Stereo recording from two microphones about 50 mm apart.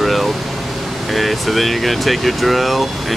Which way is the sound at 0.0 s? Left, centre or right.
Centre.